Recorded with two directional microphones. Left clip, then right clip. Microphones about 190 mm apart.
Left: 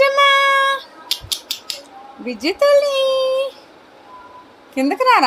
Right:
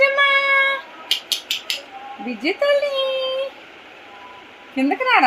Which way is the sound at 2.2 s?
25° left (ahead or behind).